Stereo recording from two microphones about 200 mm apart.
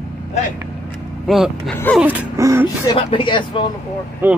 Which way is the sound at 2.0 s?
10° right (ahead or behind).